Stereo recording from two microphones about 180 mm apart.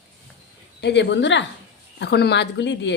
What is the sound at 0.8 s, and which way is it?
Speech, 70° left (ahead or behind).